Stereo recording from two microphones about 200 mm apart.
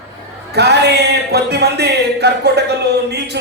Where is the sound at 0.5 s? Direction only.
55° right (ahead or behind).